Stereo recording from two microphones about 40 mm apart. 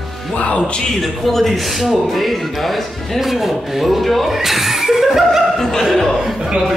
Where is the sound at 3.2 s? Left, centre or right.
Centre.